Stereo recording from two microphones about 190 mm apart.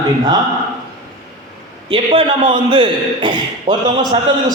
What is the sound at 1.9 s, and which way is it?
A man's voice, 25° right (ahead or behind).